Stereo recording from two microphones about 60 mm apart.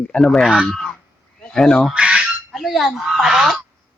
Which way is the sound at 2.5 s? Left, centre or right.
Centre.